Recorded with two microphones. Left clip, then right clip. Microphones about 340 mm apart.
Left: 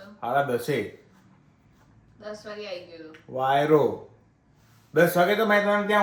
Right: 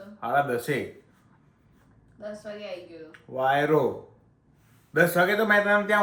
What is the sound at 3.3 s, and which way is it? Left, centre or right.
Speech, centre.